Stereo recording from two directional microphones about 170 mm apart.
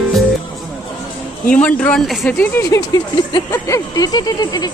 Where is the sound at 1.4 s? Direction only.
5° left (ahead or behind).